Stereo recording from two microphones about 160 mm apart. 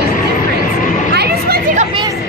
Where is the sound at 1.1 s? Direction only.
85° right.